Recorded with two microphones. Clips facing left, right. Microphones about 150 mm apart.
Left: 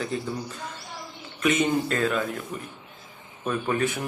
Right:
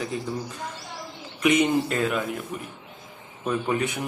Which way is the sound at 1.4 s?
15° right (ahead or behind).